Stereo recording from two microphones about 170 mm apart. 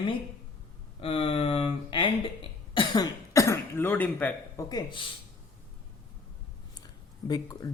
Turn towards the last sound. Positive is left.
turn(degrees=20)  # may be behind; listen again after turning